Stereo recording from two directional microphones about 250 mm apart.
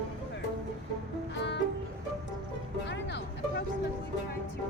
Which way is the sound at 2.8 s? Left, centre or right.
Left.